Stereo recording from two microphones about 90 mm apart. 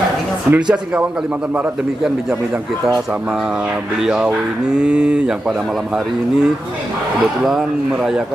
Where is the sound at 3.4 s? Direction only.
5° right (ahead or behind).